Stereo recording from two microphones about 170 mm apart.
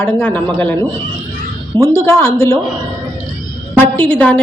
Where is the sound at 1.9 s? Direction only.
15° left (ahead or behind).